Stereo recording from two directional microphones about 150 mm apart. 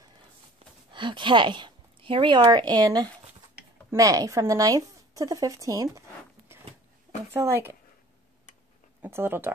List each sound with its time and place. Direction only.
0.9 s a woman's voice: 30° right (ahead or behind)
7.3 s speech: 15° right (ahead or behind)
9.0 s speech: 15° right (ahead or behind)